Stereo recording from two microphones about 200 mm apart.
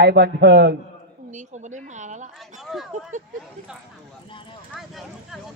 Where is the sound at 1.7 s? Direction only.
35° right (ahead or behind).